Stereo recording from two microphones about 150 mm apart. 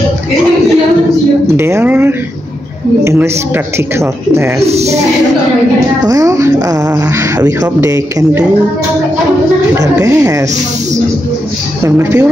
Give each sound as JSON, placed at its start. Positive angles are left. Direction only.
{"t": 1.6, "sound": "speech", "side_deg": -15}
{"t": 4.6, "sound": "a woman's voice", "side_deg": -45}
{"t": 6.0, "sound": "speech", "side_deg": -20}
{"t": 7.8, "sound": "speech", "side_deg": -20}
{"t": 9.8, "sound": "speech", "side_deg": -20}
{"t": 11.8, "sound": "speech", "side_deg": -20}